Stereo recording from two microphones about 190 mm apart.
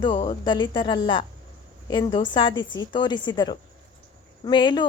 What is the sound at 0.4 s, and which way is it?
Speech, 25° left (ahead or behind).